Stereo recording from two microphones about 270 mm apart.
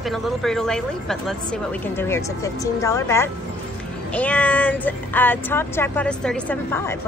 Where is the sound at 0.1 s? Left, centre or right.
Centre.